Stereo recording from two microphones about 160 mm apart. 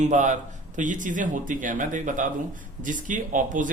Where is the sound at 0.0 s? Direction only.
50° right (ahead or behind).